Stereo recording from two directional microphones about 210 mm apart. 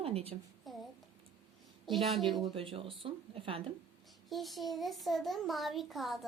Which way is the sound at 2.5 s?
25° right (ahead or behind).